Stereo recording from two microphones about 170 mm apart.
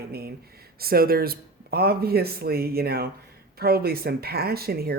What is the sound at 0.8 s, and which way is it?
A woman's voice, 60° right (ahead or behind).